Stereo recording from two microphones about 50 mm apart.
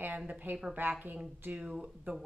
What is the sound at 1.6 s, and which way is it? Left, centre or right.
Speech, centre.